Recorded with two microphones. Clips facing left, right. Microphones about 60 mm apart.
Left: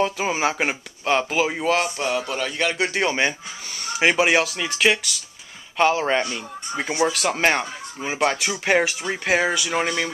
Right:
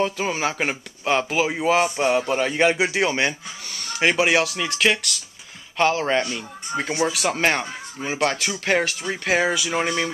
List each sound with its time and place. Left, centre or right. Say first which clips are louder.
0.0 s speech: left 1 dB; centre
1.0 s speech: even; centre
2.0 s speech: right 4 dB; right
2.8 s speech: even; centre